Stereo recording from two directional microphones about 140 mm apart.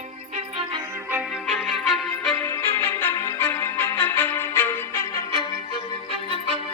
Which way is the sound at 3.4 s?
15° left (ahead or behind).